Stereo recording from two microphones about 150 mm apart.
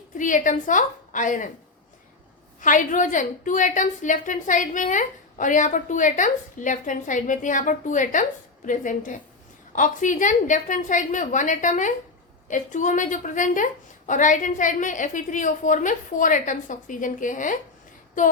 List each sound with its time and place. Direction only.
0.2 s a woman's voice: 60° left (ahead or behind)
2.6 s a woman's voice: 60° left (ahead or behind)